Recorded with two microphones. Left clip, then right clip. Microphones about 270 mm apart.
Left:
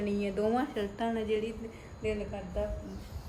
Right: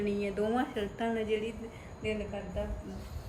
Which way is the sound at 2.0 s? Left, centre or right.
Left.